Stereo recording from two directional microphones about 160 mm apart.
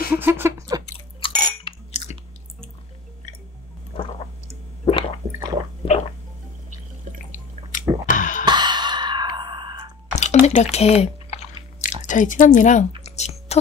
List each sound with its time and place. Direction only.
0.2 s a sound: 15° right (ahead or behind)
1.2 s chewing: 35° left (ahead or behind)
3.9 s squish: 35° left (ahead or behind)
5.9 s drip: 35° left (ahead or behind)
7.2 s drip: 55° left (ahead or behind)
8.1 s throat clearing: 55° left (ahead or behind)
8.5 s a sound: 25° right (ahead or behind)
10.1 s chewing: 45° left (ahead or behind)
13.0 s a sound: 45° left (ahead or behind)